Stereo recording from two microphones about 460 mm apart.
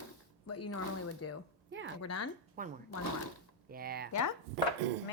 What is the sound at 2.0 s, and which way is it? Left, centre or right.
Speech, left.